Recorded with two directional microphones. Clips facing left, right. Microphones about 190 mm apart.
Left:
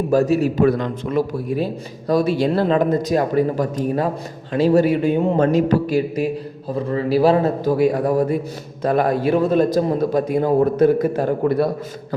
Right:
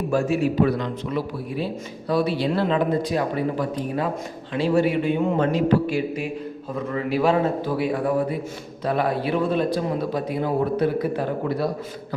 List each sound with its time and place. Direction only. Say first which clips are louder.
0.1 s a man's voice: left 5 dB; 40° left (ahead or behind); by 11.7 s 55° left (ahead or behind)